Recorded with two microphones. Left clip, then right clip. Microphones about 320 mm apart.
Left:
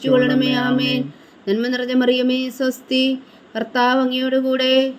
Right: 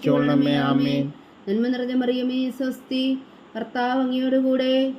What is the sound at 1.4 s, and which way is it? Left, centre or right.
Speech, left.